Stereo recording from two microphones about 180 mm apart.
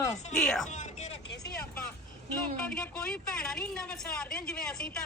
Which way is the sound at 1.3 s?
65° left (ahead or behind).